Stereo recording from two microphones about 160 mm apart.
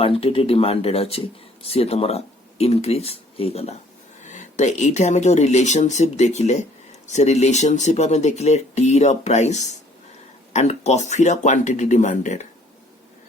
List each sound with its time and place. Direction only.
0.0 s speech: 35° left (ahead or behind)